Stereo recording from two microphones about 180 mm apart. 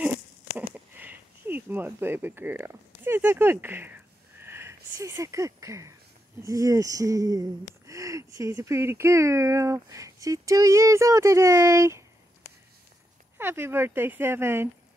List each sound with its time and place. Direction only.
0.6 s a sound: 10° right (ahead or behind)
6.4 s speech: 20° right (ahead or behind)
13.4 s speech: 15° right (ahead or behind)